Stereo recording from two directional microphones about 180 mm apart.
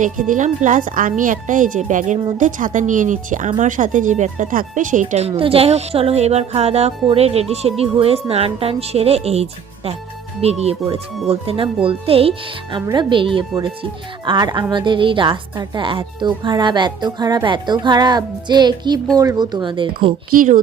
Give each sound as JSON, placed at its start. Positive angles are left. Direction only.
{"t": 0.0, "sound": "a woman's voice", "side_deg": -45}
{"t": 5.3, "sound": "a woman's voice", "side_deg": -30}
{"t": 20.3, "sound": "a woman's voice", "side_deg": -50}